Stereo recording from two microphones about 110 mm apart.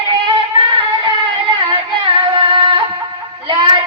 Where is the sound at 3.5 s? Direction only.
45° right (ahead or behind).